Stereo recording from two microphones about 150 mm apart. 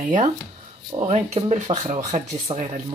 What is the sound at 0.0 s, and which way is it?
Speech, 60° right (ahead or behind).